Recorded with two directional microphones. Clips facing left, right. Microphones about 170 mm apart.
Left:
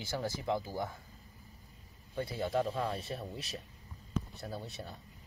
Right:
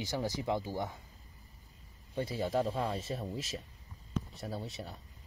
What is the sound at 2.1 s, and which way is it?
Speech, 20° right (ahead or behind).